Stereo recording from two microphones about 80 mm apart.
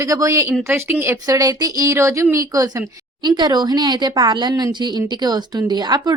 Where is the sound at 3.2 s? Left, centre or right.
Right.